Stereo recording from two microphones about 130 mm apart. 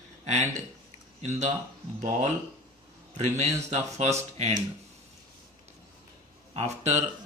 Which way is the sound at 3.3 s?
60° right (ahead or behind).